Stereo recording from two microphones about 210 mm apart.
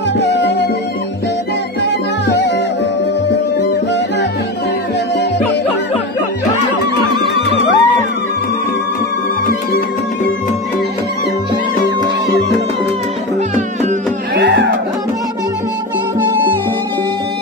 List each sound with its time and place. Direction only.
0.2 s music: 55° left (ahead or behind)
1.8 s music: 55° left (ahead or behind)
7.3 s music: 30° right (ahead or behind)
13.6 s music: 35° right (ahead or behind)
14.3 s music: 55° right (ahead or behind)